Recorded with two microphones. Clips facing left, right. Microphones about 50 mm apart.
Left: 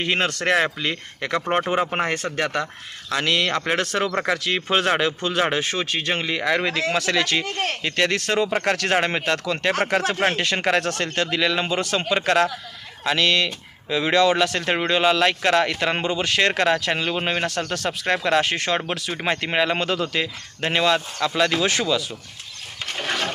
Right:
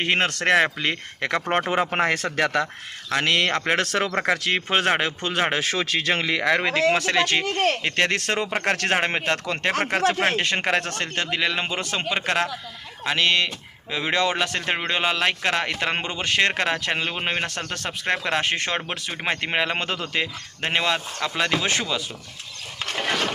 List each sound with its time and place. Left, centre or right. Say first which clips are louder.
0.0 s speech: even; right
2.0 s speech: right 2 dB; right
3.1 s speech: even; right
4.1 s a man's voice: even; right
4.4 s speech: left 1 dB; right
5.5 s speech: even; right
6.6 s a man's voice: right 2 dB; right
18.9 s a man's voice: left 2 dB; centre